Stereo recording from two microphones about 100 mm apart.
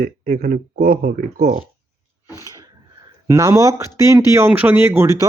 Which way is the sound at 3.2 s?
35° right (ahead or behind).